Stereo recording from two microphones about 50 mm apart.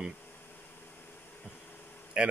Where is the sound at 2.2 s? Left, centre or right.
Centre.